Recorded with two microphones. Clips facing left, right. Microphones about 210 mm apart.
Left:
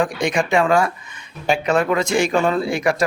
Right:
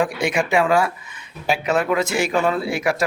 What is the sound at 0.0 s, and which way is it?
A man's voice, 5° right (ahead or behind).